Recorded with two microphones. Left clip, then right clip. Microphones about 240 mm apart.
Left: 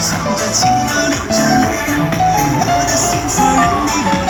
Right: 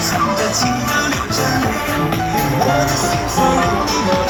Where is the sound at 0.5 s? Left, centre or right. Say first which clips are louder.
Left 4 dB; centre.